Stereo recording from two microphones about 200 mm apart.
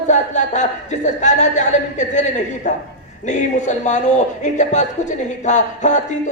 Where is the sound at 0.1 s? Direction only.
35° left (ahead or behind).